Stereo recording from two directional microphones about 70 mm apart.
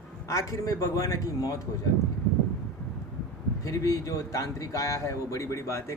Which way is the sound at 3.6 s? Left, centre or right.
Left.